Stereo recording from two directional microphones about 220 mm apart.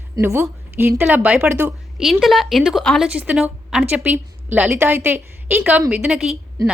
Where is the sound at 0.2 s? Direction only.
10° right (ahead or behind).